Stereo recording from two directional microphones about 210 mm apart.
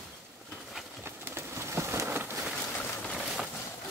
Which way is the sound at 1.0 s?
10° right (ahead or behind).